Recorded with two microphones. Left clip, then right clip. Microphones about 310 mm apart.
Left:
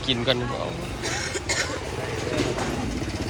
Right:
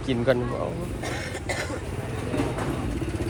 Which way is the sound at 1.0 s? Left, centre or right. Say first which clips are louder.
Left 4 dB; right.